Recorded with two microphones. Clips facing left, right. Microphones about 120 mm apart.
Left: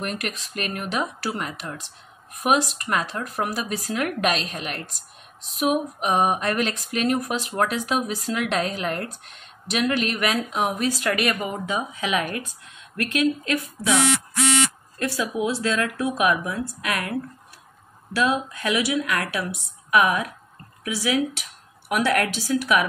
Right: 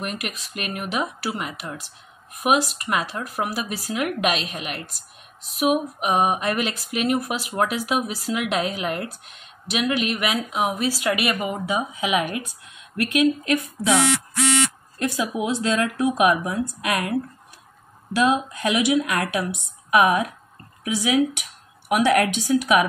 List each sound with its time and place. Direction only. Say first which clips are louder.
0.2 s speech: left 1 dB; 5° right (ahead or behind)
15.0 s speech: right 1 dB; 20° right (ahead or behind)